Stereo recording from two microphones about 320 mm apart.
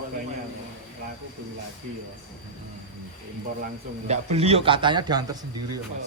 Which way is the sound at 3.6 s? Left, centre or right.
Right.